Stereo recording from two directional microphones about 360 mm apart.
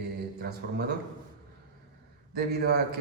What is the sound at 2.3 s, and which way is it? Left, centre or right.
Speech, right.